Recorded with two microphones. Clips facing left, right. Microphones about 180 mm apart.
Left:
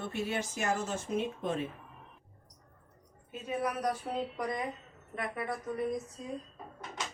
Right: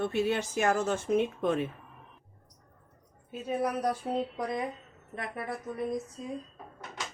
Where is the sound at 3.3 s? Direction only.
35° right (ahead or behind).